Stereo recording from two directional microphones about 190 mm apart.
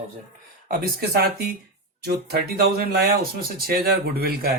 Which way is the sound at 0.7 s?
50° right (ahead or behind).